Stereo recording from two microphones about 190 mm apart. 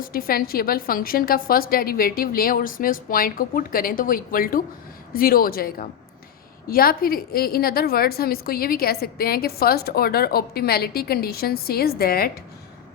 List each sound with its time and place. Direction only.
0.0 s a woman's voice: 50° left (ahead or behind)